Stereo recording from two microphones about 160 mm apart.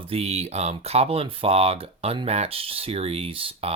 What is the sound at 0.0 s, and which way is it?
Speech, 40° right (ahead or behind).